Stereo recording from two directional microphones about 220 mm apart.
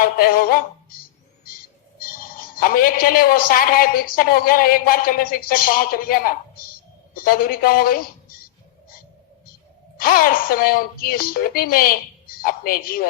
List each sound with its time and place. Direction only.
0.0 s a woman's voice: 40° left (ahead or behind)
2.6 s a woman's voice: 40° left (ahead or behind)
10.0 s a woman's voice: 40° left (ahead or behind)